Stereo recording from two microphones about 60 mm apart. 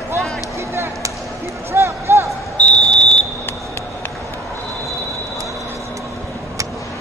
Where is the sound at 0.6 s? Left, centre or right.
Right.